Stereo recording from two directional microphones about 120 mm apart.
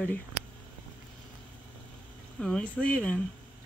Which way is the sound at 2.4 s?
5° left (ahead or behind).